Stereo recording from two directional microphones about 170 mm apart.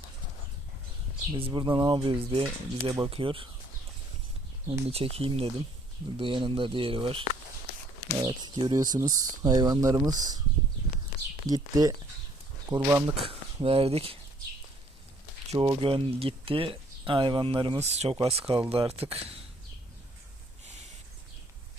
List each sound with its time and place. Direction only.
1.4 s speech: 30° right (ahead or behind)
4.9 s speech: 35° right (ahead or behind)
11.4 s speech: 20° right (ahead or behind)
13.1 s speech: 35° right (ahead or behind)
15.5 s speech: 30° right (ahead or behind)